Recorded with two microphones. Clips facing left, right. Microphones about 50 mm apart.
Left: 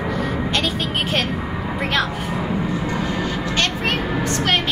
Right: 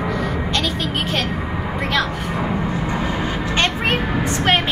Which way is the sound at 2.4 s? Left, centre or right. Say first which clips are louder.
Right 2 dB; centre.